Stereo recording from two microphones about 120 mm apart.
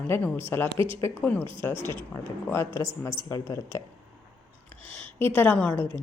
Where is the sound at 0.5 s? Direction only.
20° left (ahead or behind).